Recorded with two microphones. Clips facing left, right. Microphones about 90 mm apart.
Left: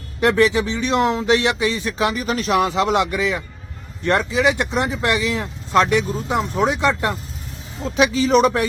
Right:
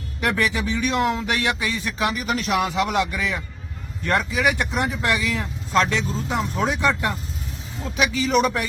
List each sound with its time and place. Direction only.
0.2 s speech: 25° left (ahead or behind)
7.9 s a man's voice: 30° left (ahead or behind)